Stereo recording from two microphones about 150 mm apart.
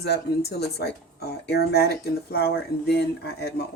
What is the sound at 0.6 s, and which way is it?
Speech, 90° left.